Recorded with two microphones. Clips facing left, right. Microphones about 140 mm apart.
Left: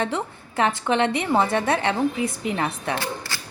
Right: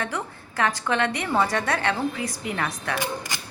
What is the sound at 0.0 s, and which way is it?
A woman's voice, 25° left (ahead or behind).